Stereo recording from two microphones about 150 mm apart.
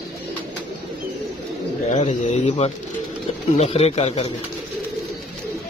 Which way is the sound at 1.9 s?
45° left (ahead or behind).